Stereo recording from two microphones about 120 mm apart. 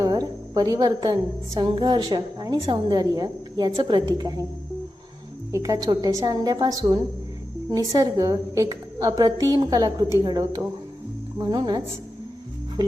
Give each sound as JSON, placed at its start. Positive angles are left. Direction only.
{"t": 0.0, "sound": "a woman's voice", "side_deg": -35}
{"t": 5.5, "sound": "a woman's voice", "side_deg": -25}